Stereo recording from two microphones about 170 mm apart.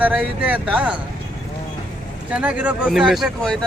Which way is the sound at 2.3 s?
10° right (ahead or behind).